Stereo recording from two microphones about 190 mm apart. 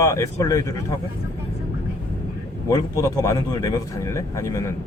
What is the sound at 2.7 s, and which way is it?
Speech, 15° left (ahead or behind).